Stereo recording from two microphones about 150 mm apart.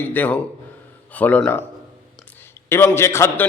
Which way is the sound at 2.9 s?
15° left (ahead or behind).